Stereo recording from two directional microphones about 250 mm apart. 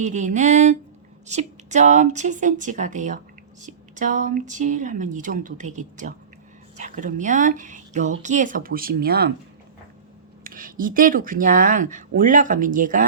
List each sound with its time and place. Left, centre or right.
0.0 s speech: right
10.4 s speech: right